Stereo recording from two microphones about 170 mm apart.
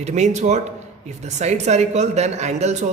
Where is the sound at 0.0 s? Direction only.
40° right (ahead or behind).